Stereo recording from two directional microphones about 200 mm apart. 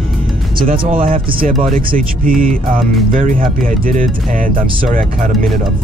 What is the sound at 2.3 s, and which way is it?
Speech, centre (ahead or behind).